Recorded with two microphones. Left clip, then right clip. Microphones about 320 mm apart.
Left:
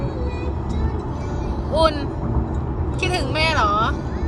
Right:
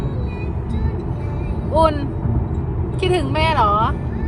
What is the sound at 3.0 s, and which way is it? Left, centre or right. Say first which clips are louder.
Speech: right 2 dB; centre.